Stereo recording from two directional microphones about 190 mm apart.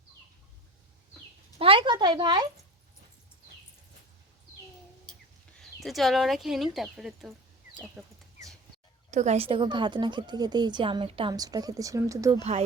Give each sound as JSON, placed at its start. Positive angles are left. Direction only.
{"t": 1.5, "sound": "a woman's voice", "side_deg": -30}
{"t": 5.8, "sound": "speech", "side_deg": 0}
{"t": 9.0, "sound": "a woman's voice", "side_deg": -40}